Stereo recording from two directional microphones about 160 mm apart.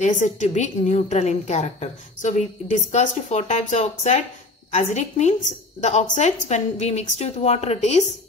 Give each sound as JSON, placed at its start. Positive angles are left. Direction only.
{"t": 0.0, "sound": "a woman's voice", "side_deg": 50}